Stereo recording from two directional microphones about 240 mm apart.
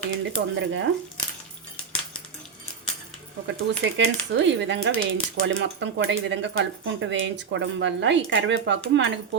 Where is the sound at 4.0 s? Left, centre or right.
Right.